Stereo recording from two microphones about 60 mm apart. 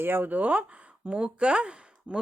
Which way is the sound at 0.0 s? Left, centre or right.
Right.